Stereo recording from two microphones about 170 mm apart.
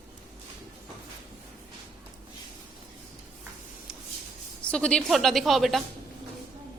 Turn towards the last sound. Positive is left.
turn(degrees=0)  # may be behind; listen again after turning